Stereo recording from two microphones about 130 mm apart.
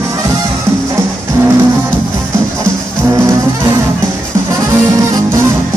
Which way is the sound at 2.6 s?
25° right (ahead or behind).